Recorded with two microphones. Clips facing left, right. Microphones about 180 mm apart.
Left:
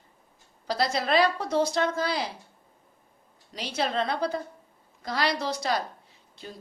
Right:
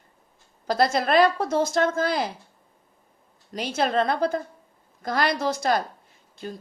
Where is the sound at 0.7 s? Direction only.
50° right (ahead or behind).